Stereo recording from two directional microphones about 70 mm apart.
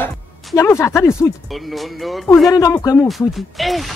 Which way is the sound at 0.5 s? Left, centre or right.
Left.